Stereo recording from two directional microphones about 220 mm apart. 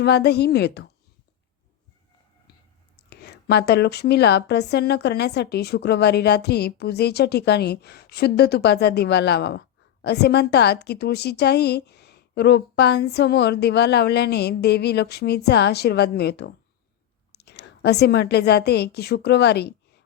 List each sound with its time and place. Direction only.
0.0 s a woman's voice: 50° left (ahead or behind)
3.1 s a woman's voice: 50° left (ahead or behind)